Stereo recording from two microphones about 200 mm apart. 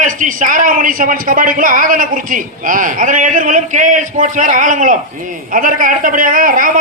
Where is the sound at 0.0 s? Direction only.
40° right (ahead or behind).